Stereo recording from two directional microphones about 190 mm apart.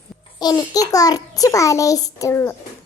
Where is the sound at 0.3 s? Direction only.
20° left (ahead or behind).